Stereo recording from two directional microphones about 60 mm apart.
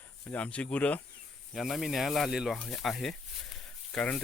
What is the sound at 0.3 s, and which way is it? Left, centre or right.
Speech, left.